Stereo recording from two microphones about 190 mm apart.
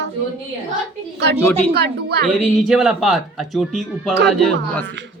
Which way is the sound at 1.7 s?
60° right (ahead or behind).